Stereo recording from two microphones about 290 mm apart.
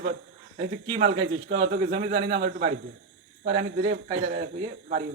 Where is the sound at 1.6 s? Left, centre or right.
Right.